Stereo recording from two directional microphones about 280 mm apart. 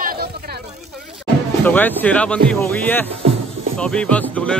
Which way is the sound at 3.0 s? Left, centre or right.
Right.